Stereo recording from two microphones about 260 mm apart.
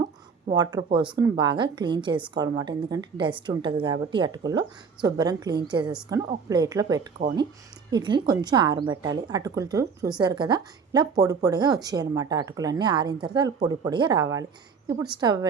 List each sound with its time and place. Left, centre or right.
0.5 s a woman's voice: centre